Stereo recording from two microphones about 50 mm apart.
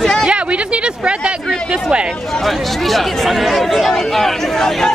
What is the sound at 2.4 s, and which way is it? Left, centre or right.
Speech, centre.